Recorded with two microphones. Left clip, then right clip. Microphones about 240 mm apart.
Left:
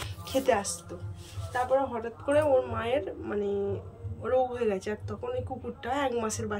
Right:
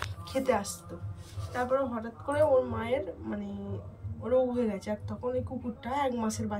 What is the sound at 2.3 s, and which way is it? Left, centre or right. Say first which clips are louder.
Speech: left 1 dB; centre.